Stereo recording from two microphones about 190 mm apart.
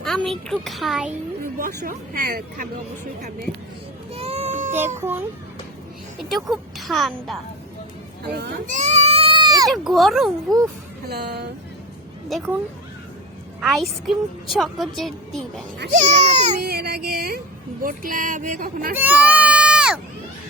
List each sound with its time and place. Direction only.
0.0 s speech: centre (ahead or behind)
1.5 s speech: 50° right (ahead or behind)
4.1 s baby cry: 30° right (ahead or behind)
4.9 s a child's voice: 10° right (ahead or behind)
6.2 s a woman's voice: centre (ahead or behind)
8.2 s speech: 60° right (ahead or behind)
8.6 s goat: 40° right (ahead or behind); by 9.6 s 20° right (ahead or behind)
9.6 s a woman's voice: centre (ahead or behind)
11.1 s speech: 60° right (ahead or behind)
13.6 s a woman's voice: centre (ahead or behind)
15.9 s speech: 40° right (ahead or behind)
16.6 s speech: 55° right (ahead or behind)
18.9 s a sound: 10° right (ahead or behind)